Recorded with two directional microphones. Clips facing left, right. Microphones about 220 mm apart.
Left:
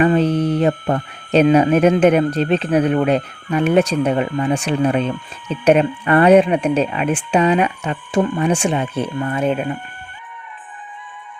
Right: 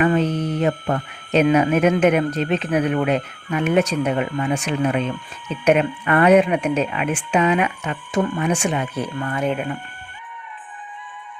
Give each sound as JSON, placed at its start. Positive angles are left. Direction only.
{"t": 0.0, "sound": "speech", "side_deg": 30}